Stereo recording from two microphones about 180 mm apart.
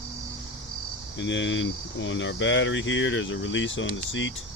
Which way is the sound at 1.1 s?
90° left.